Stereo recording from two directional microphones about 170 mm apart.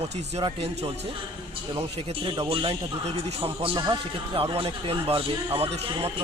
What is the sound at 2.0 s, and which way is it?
A man's voice, 35° right (ahead or behind).